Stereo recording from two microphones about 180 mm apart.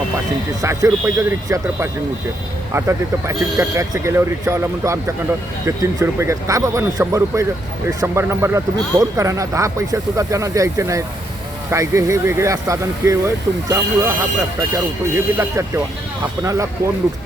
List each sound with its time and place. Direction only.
0.6 s speech: 15° right (ahead or behind)
15.1 s speech: 15° right (ahead or behind)